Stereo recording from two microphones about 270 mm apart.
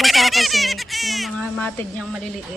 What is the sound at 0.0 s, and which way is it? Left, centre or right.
Baby laughter, centre.